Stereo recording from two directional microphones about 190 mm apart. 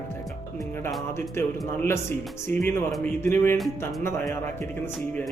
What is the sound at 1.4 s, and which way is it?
Speech, 15° left (ahead or behind).